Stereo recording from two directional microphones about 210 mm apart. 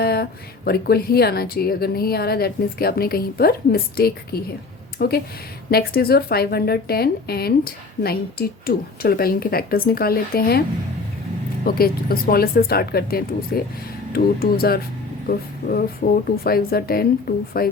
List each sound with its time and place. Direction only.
0.0 s a woman's voice: 50° left (ahead or behind)
11.6 s a woman's voice: 45° left (ahead or behind)
16.0 s a woman's voice: 40° left (ahead or behind)